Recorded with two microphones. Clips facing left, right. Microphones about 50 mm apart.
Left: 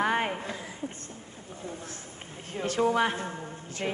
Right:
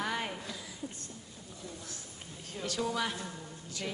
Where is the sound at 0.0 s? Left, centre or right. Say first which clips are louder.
Left 8 dB; left.